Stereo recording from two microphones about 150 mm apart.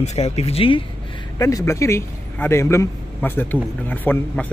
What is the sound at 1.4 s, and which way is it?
A man's voice, 20° left (ahead or behind).